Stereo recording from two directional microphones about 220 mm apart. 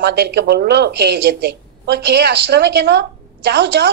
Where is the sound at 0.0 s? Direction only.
50° right (ahead or behind).